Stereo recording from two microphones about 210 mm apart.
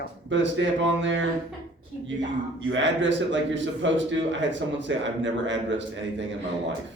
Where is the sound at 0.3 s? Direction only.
60° right (ahead or behind).